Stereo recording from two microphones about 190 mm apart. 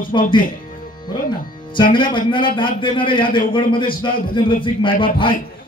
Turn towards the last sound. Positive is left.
turn(degrees=25)  # may be behind; listen again after turning